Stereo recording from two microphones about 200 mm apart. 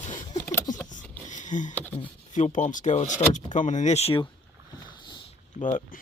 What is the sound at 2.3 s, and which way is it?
Speech, 40° left (ahead or behind).